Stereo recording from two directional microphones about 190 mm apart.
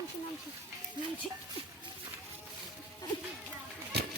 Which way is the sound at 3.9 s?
60° right (ahead or behind).